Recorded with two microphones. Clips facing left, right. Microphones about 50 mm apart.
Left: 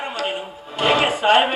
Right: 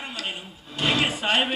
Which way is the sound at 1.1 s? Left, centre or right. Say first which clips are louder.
Left 8 dB; left.